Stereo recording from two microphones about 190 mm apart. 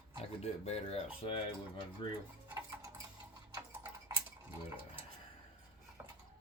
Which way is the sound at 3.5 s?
20° right (ahead or behind).